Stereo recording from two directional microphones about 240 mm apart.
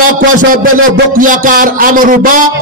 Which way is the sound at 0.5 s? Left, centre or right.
Right.